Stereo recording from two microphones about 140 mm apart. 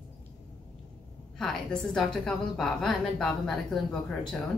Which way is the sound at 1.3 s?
5° left (ahead or behind).